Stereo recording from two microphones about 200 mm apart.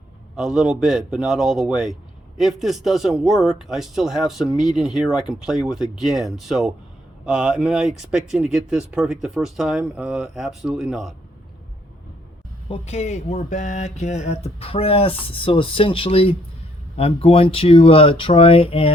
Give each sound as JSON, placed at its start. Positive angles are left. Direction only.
{"t": 0.3, "sound": "speech", "side_deg": 0}
{"t": 12.6, "sound": "speech", "side_deg": 30}